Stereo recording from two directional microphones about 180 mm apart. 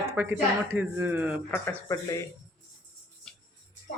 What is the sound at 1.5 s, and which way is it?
Speech, 15° left (ahead or behind).